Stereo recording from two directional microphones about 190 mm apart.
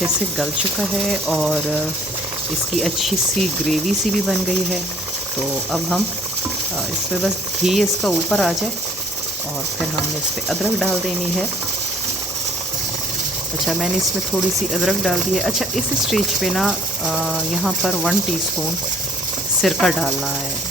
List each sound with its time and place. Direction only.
0.3 s speech: centre (ahead or behind)
2.8 s speech: centre (ahead or behind)
7.2 s speech: centre (ahead or behind)
10.5 s speech: centre (ahead or behind)
14.7 s speech: centre (ahead or behind)
19.6 s speech: centre (ahead or behind)